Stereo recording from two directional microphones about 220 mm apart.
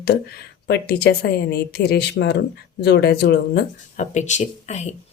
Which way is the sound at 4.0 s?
35° left (ahead or behind).